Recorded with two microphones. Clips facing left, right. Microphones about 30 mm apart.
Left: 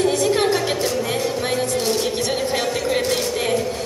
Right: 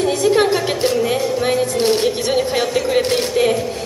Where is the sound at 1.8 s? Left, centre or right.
Right.